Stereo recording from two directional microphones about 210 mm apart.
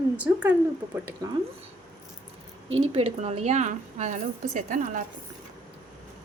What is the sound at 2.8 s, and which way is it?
A woman's voice, 30° right (ahead or behind).